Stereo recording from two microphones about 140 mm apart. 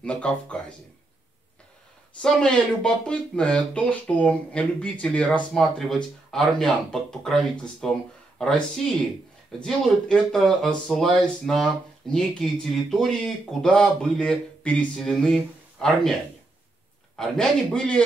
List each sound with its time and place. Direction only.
0.0 s speech: 10° left (ahead or behind)
2.2 s speech: 5° left (ahead or behind)
17.2 s speech: 5° left (ahead or behind)